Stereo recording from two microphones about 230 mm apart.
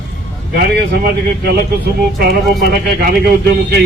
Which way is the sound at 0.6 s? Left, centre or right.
Right.